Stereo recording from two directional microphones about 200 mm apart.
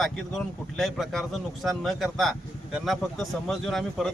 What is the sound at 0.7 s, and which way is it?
Speech, centre (ahead or behind).